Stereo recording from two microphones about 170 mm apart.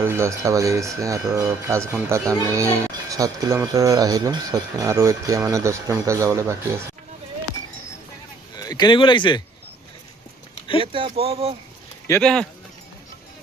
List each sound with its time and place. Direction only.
0.0 s speech: 15° right (ahead or behind)
8.5 s speech: 25° left (ahead or behind)
10.9 s speech: 35° right (ahead or behind)
12.2 s speech: 5° left (ahead or behind)